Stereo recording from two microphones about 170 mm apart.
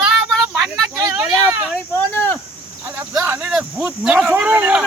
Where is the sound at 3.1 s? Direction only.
15° right (ahead or behind).